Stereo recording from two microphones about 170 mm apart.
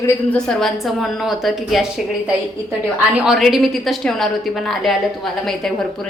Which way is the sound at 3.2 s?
Centre (ahead or behind).